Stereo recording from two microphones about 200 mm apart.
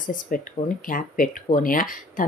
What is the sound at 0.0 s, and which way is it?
Speech, 45° left (ahead or behind).